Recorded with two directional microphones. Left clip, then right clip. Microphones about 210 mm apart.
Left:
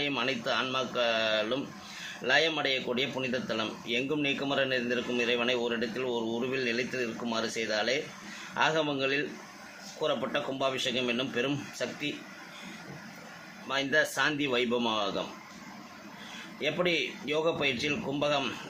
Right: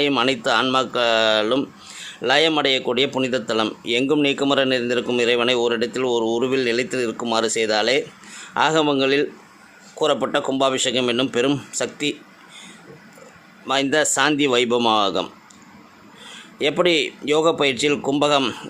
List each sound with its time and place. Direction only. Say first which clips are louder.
0.0 s speech: right 11 dB; 55° right (ahead or behind)
13.7 s speech: right 9 dB; 50° right (ahead or behind)
16.6 s speech: right 11 dB; 55° right (ahead or behind)